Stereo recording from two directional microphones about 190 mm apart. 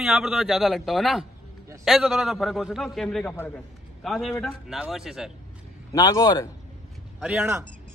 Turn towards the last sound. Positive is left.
turn(degrees=-10)  # may be behind; listen again after turning